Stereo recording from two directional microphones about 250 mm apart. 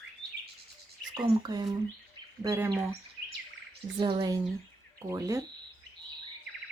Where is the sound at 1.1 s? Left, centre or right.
Centre.